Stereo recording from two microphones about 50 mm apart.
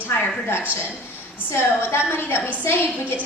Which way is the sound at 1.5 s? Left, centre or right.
Left.